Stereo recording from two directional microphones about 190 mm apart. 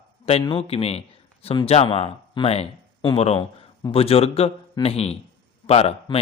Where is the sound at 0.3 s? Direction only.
30° left (ahead or behind).